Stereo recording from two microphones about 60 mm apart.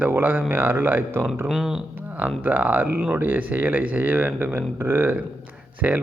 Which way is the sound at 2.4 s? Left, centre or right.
Right.